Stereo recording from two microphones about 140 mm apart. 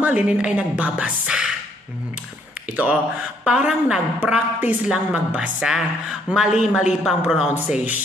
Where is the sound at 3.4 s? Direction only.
5° right (ahead or behind).